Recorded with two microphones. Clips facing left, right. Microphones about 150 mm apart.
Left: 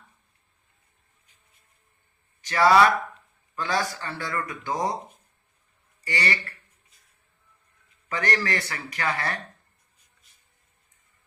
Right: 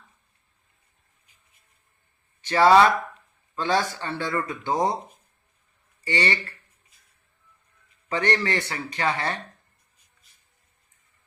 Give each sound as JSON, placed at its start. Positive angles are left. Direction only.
{"t": 2.5, "sound": "a man's voice", "side_deg": -25}
{"t": 6.1, "sound": "a man's voice", "side_deg": -25}
{"t": 8.1, "sound": "a man's voice", "side_deg": -25}